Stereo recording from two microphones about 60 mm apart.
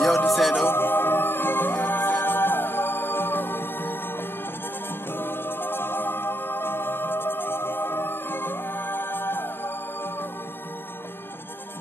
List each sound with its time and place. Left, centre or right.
0.3 s music: centre
0.7 s music: left